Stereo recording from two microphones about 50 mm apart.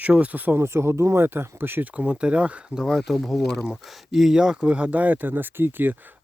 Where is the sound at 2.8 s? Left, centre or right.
Centre.